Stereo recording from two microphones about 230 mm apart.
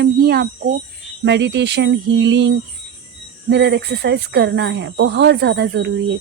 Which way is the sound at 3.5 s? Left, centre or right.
Right.